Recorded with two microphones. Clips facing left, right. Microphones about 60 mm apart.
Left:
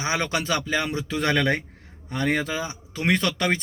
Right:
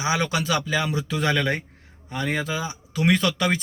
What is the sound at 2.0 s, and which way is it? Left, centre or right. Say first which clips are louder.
Speech: left 3 dB; left.